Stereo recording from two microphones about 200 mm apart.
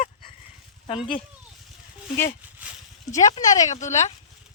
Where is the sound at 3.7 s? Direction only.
35° left (ahead or behind).